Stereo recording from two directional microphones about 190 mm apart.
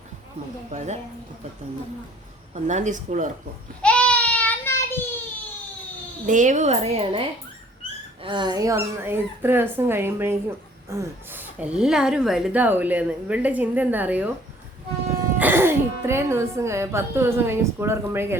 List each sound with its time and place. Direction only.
0.7 s a woman's voice: 40° right (ahead or behind)
2.6 s a woman's voice: 40° right (ahead or behind)
3.8 s child singing: 5° left (ahead or behind)
6.2 s a woman's voice: 40° right (ahead or behind); by 14.3 s 10° right (ahead or behind)
15.4 s speech: 10° right (ahead or behind)